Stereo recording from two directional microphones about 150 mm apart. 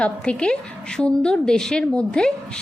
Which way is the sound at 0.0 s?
5° left (ahead or behind).